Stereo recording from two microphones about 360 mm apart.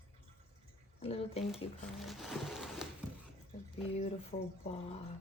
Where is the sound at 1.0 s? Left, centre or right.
Centre.